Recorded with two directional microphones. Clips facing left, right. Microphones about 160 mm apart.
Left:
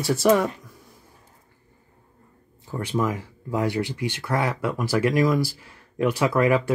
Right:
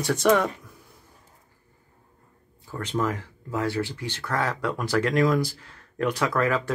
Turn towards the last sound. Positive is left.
turn(degrees=10)  # may be behind; listen again after turning